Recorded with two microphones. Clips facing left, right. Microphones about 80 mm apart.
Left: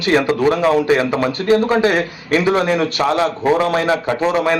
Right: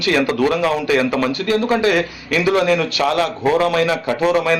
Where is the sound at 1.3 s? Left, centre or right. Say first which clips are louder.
Left 3 dB; left.